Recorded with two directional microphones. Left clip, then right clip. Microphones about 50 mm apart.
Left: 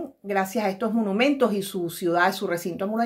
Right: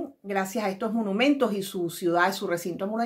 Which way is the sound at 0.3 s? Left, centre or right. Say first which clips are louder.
Left 3 dB; left.